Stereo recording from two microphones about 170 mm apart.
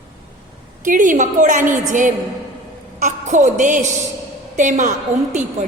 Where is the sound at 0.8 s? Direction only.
50° right (ahead or behind).